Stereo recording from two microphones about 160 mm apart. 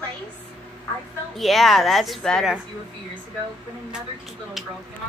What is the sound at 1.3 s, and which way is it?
Speech, centre (ahead or behind).